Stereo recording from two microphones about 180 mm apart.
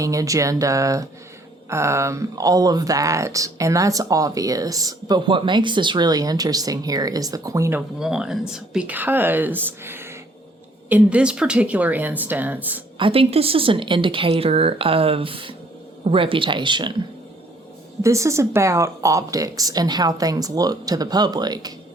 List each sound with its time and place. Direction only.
0.0 s speech: 20° right (ahead or behind)
13.0 s speech: 30° right (ahead or behind)
18.0 s speech: 15° right (ahead or behind)